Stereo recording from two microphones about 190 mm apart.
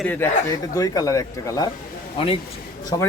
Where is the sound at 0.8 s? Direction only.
20° left (ahead or behind).